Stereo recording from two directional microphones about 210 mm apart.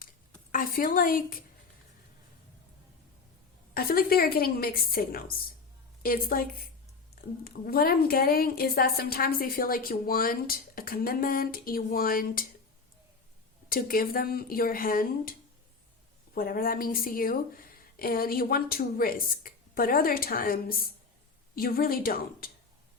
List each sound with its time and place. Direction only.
0.5 s a woman's voice: 40° left (ahead or behind)
3.8 s a woman's voice: 45° left (ahead or behind)
7.4 s a woman's voice: 45° left (ahead or behind)
13.7 s a woman's voice: 45° left (ahead or behind)